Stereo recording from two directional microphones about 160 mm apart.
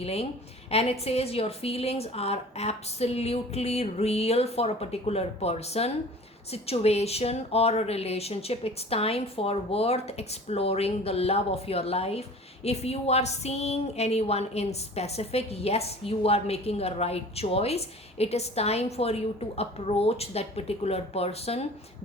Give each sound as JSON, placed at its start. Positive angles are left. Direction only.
{"t": 0.0, "sound": "a woman's voice", "side_deg": 40}